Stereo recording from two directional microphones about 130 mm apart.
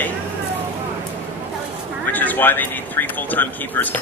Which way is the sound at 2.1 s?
15° left (ahead or behind).